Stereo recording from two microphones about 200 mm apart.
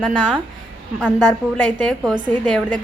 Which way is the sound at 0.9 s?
5° left (ahead or behind).